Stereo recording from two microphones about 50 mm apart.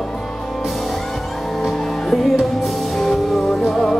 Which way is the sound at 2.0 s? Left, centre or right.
Centre.